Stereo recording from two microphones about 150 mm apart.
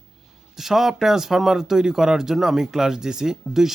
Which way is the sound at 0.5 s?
Centre (ahead or behind).